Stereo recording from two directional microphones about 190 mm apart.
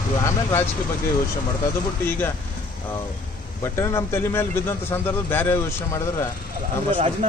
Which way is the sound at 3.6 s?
15° left (ahead or behind).